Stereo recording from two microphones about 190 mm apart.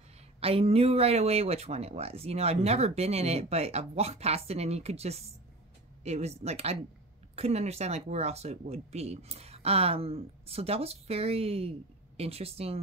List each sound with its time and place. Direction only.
0.4 s speech: 30° right (ahead or behind)